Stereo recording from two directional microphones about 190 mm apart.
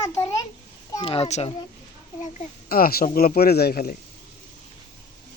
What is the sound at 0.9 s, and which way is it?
Speech, 30° left (ahead or behind).